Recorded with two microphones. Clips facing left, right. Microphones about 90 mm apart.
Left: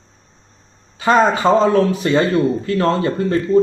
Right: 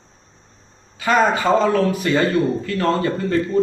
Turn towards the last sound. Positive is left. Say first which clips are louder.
# left 4 dB
turn(degrees=30)  # may be behind; listen again after turning